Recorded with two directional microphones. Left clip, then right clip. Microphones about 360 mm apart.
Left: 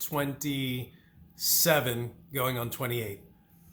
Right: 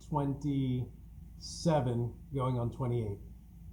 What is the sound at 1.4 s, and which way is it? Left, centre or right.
Speech, centre.